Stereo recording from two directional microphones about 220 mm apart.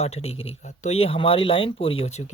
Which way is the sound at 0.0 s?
30° left (ahead or behind).